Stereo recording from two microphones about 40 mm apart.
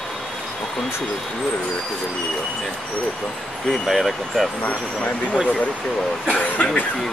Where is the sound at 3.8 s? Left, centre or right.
Centre.